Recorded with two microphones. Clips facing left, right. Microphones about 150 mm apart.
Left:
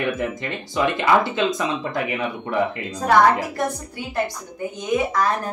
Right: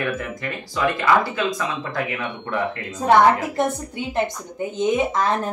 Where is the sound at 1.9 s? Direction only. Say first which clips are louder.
Left 2 dB; 20° left (ahead or behind).